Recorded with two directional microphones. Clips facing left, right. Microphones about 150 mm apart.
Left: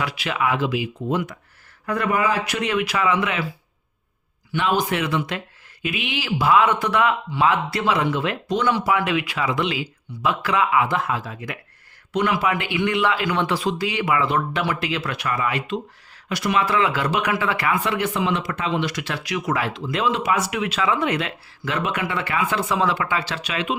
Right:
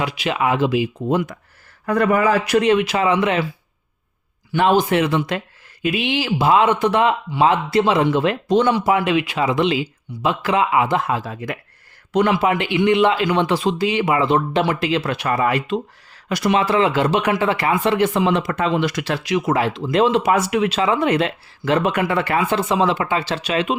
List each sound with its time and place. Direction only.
0.0 s speech: 20° right (ahead or behind)
1.9 s speech: 45° right (ahead or behind)
4.5 s speech: 40° right (ahead or behind)
4.8 s speech: 30° right (ahead or behind)
16.5 s speech: 30° right (ahead or behind); by 19.1 s 45° right (ahead or behind)
19.1 s speech: 30° right (ahead or behind)